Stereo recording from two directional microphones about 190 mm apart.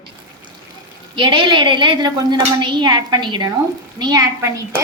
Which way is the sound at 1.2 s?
25° right (ahead or behind).